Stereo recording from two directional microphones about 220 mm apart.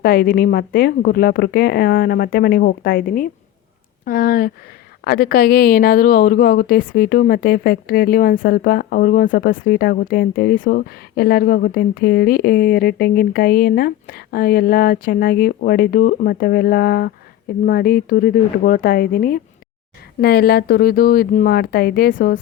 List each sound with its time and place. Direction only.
0.0 s speech: 45° left (ahead or behind)